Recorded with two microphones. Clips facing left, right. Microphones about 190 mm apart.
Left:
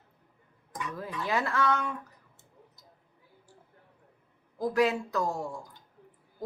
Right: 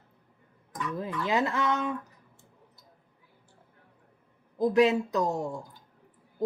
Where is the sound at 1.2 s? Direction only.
20° right (ahead or behind).